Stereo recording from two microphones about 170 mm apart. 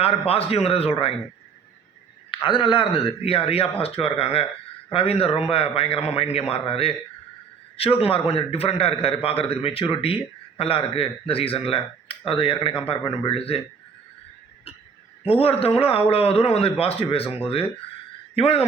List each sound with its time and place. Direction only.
0.0 s a man's voice: 35° left (ahead or behind)
2.3 s a man's voice: 30° left (ahead or behind)
15.2 s a man's voice: 35° left (ahead or behind)